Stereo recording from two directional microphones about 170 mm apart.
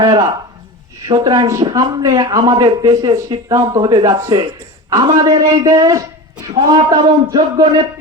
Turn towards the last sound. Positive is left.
turn(degrees=-20)  # may be behind; listen again after turning